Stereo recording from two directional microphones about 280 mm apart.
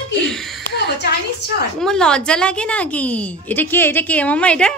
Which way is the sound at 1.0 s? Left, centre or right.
Left.